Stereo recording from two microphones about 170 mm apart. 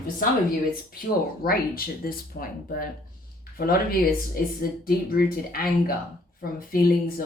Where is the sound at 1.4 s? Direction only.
60° left (ahead or behind).